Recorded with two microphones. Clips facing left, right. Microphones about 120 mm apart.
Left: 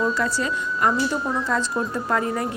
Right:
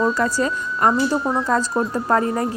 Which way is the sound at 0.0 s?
45° right (ahead or behind).